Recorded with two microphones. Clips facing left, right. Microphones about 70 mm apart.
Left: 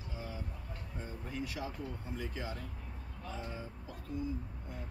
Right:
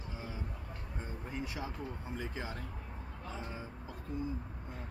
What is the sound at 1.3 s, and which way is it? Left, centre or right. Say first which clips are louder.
Speech: left 1 dB; right.